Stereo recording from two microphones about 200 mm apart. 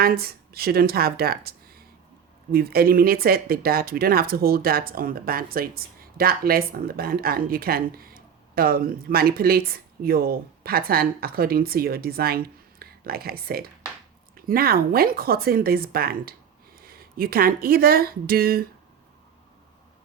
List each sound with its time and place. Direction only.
0.0 s speech: 50° right (ahead or behind)